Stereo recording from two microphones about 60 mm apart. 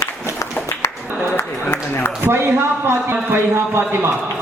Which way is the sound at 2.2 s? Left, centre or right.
Right.